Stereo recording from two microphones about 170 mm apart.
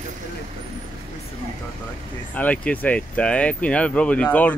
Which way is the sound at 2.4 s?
10° left (ahead or behind).